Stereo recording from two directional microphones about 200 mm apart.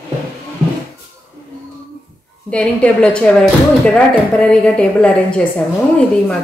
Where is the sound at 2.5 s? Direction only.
5° left (ahead or behind).